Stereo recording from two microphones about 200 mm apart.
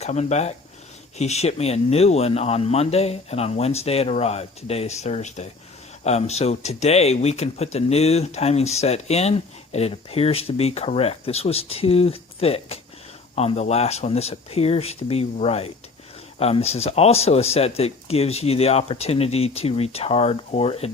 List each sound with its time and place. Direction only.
0.0 s speech: 35° left (ahead or behind)